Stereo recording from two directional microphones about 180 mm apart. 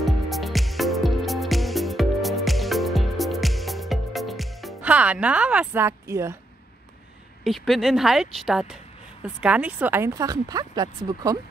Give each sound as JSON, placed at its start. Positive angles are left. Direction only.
{"t": 0.0, "sound": "music", "side_deg": 0}
{"t": 7.4, "sound": "a woman's voice", "side_deg": 0}